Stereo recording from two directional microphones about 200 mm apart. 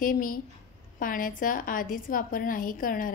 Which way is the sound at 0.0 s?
45° left (ahead or behind).